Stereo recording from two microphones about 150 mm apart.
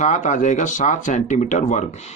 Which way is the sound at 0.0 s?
55° left (ahead or behind).